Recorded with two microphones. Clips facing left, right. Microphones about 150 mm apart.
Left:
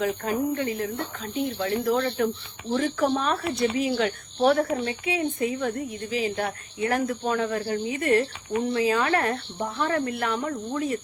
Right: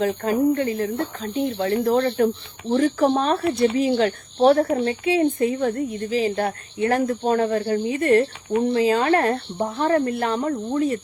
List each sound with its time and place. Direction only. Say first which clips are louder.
0.0 s a woman's voice: right 6 dB; 40° right (ahead or behind)